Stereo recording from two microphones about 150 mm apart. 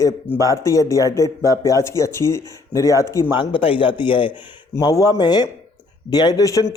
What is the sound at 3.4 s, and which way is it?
Speech, 35° left (ahead or behind).